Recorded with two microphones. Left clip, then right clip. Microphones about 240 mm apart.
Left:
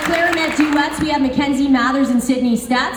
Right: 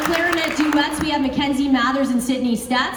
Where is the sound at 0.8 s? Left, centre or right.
Centre.